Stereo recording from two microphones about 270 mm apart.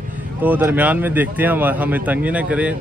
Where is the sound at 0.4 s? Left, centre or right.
Centre.